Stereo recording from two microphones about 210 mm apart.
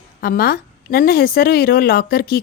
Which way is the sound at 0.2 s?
45° left (ahead or behind).